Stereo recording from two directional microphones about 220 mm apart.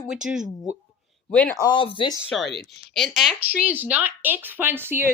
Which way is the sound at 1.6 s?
20° left (ahead or behind).